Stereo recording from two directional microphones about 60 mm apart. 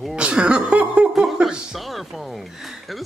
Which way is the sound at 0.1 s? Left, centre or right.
Centre.